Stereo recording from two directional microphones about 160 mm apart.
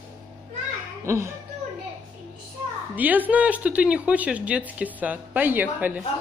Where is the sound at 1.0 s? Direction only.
15° right (ahead or behind).